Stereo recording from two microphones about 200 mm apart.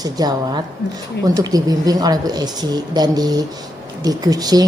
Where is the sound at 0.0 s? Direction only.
20° right (ahead or behind).